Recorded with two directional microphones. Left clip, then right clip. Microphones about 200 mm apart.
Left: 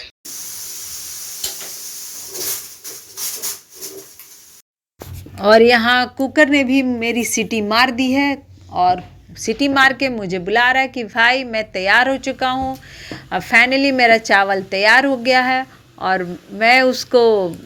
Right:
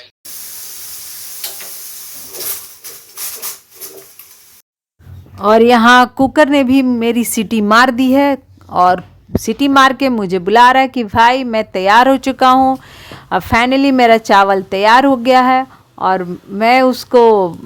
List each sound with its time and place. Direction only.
5.4 s speech: 20° right (ahead or behind)